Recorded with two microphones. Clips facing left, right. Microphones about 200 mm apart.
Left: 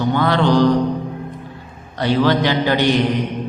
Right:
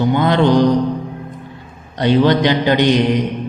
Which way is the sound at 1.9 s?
20° right (ahead or behind).